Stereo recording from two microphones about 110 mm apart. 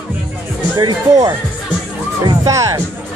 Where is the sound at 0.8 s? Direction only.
40° right (ahead or behind).